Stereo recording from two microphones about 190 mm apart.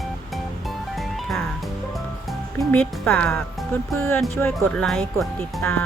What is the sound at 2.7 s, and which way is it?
Speech, 10° left (ahead or behind).